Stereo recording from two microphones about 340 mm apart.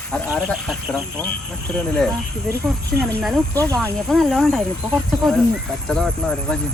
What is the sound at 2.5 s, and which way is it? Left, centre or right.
Speech, centre.